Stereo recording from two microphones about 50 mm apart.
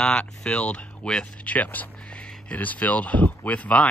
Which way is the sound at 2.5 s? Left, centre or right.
Left.